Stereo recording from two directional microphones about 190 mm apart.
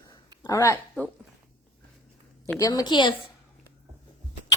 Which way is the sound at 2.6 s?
20° left (ahead or behind).